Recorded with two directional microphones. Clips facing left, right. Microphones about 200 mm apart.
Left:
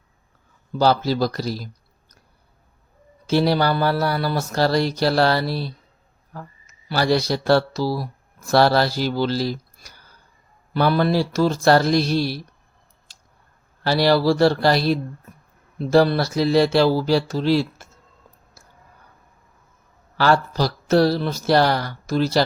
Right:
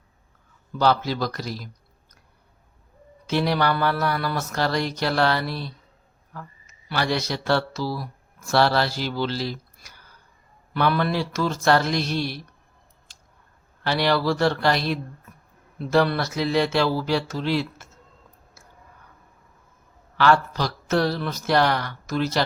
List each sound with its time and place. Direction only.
0.7 s speech: 35° left (ahead or behind)
3.2 s speech: 35° left (ahead or behind)
13.8 s speech: 35° left (ahead or behind)
20.1 s speech: 35° left (ahead or behind)